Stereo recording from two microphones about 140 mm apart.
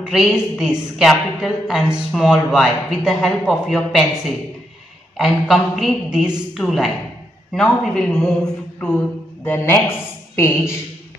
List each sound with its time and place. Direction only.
0.0 s a woman's voice: centre (ahead or behind)
5.1 s a woman's voice: centre (ahead or behind); by 10.7 s 20° left (ahead or behind)